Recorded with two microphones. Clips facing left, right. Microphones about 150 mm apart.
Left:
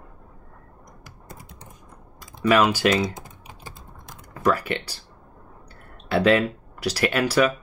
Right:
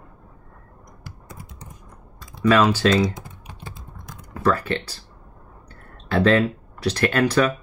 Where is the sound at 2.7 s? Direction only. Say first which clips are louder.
Right 2 dB; 15° left (ahead or behind).